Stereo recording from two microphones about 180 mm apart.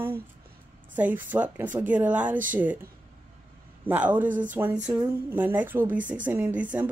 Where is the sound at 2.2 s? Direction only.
45° right (ahead or behind).